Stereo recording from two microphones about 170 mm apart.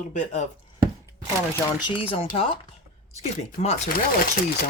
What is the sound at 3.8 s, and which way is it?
Speech, 60° left (ahead or behind).